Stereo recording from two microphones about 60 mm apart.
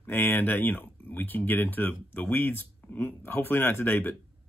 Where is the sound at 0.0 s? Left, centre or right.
Left.